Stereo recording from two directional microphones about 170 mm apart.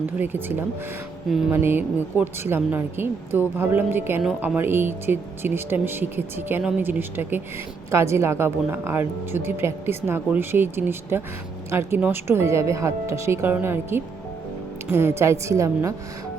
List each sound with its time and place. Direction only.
0.2 s speech: 10° right (ahead or behind)